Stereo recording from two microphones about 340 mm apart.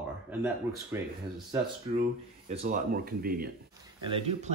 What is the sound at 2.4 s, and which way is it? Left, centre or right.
Speech, right.